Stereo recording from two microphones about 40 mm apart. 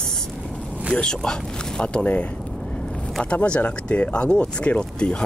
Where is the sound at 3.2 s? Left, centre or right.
Left.